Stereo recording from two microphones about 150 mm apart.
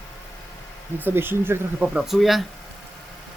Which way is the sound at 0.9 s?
15° right (ahead or behind).